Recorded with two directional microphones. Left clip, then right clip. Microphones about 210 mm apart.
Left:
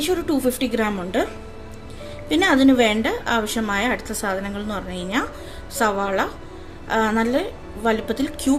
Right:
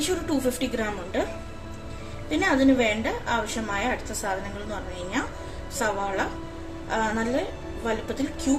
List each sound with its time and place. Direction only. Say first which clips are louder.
0.0 s a woman's voice: left 5 dB; 35° left (ahead or behind)
2.3 s a woman's voice: left 5 dB; 45° left (ahead or behind)